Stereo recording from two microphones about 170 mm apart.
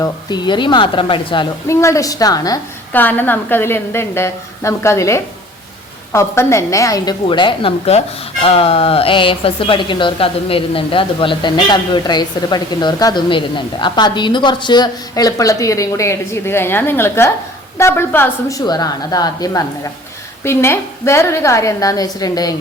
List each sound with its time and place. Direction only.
0.0 s a woman's voice: 25° left (ahead or behind)
1.6 s a woman's voice: 15° left (ahead or behind)